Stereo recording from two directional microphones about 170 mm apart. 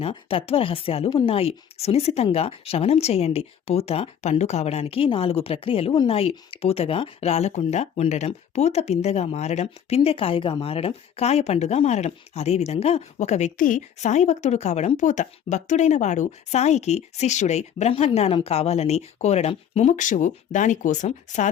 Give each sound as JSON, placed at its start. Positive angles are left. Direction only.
{"t": 0.0, "sound": "speech", "side_deg": 35}